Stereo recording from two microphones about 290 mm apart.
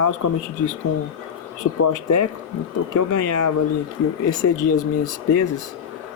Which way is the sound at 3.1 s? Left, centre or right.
Left.